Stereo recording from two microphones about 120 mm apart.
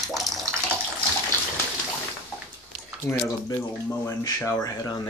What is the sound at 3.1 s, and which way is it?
Speech, 20° left (ahead or behind).